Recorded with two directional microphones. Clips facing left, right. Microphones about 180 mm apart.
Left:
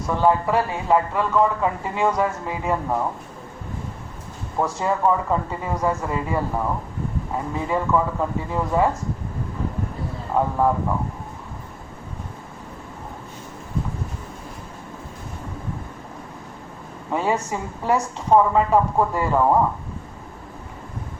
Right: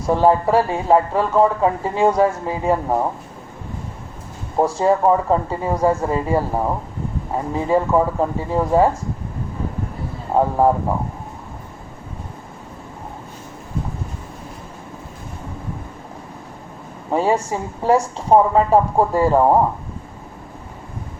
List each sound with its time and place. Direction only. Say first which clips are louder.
0.1 s speech: right 4 dB; 35° right (ahead or behind)
4.5 s speech: right 6 dB; 30° right (ahead or behind)
10.3 s speech: right 4 dB; 30° right (ahead or behind)
17.1 s speech: right 4 dB; 30° right (ahead or behind)